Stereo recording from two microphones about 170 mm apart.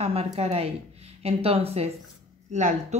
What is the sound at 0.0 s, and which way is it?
Speech, 35° right (ahead or behind).